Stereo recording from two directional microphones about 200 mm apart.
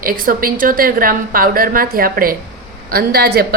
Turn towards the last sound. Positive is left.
turn(degrees=-50)  # may be behind; listen again after turning